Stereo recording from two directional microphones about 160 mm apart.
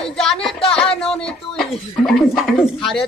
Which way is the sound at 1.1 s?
5° left (ahead or behind).